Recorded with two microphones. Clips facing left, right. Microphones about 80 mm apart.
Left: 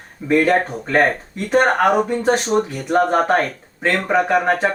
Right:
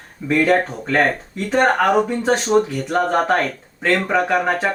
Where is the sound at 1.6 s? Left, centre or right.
Centre.